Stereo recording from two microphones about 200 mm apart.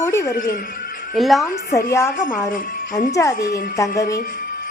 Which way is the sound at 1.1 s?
Centre (ahead or behind).